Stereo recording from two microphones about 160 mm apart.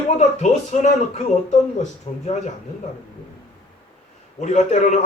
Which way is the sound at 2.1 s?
40° left (ahead or behind).